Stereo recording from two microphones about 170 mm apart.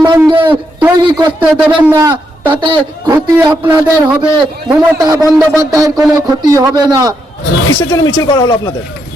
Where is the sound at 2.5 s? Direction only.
25° right (ahead or behind).